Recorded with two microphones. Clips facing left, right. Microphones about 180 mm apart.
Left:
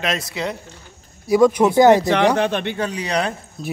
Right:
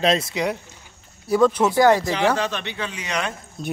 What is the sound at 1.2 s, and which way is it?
Speech, 10° left (ahead or behind).